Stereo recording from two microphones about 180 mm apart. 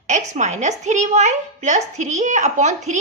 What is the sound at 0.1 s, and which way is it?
A woman's voice, 40° right (ahead or behind).